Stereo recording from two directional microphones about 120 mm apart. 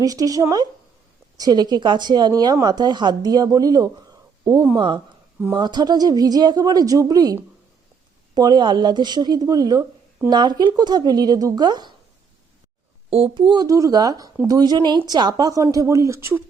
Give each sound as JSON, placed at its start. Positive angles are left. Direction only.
{"t": 0.0, "sound": "a woman's voice", "side_deg": -30}
{"t": 8.4, "sound": "a woman's voice", "side_deg": -35}
{"t": 13.1, "sound": "a woman's voice", "side_deg": -50}